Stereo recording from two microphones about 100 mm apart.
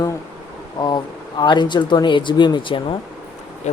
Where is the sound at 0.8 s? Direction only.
50° left (ahead or behind).